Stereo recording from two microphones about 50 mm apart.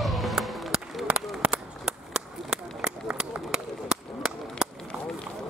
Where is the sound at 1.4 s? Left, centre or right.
Right.